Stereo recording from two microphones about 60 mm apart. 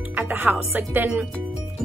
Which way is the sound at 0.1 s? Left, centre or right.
Right.